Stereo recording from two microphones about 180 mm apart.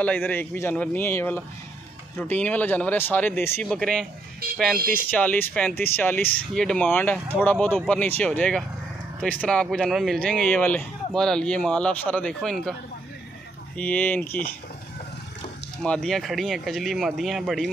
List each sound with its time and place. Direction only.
0.0 s speech: 10° left (ahead or behind)
4.4 s speech: 60° right (ahead or behind)
5.1 s speech: 10° left (ahead or behind)
13.7 s speech: 10° left (ahead or behind)
15.8 s speech: 5° left (ahead or behind)